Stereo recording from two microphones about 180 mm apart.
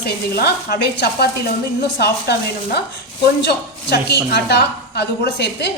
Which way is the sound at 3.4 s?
65° left (ahead or behind).